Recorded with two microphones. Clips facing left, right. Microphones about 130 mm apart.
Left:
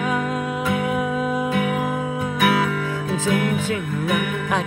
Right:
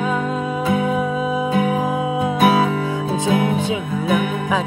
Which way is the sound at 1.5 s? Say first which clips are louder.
Right 3 dB; 25° right (ahead or behind).